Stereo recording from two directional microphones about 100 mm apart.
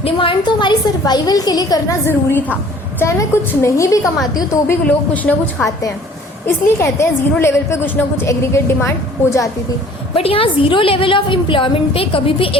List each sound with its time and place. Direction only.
0.0 s a woman's voice: 60° left (ahead or behind); by 2.0 s 40° left (ahead or behind)
2.0 s a woman's voice: 20° left (ahead or behind)
5.1 s a woman's voice: 15° left (ahead or behind)
6.4 s a woman's voice: 25° left (ahead or behind)
10.2 s a woman's voice: 70° left (ahead or behind)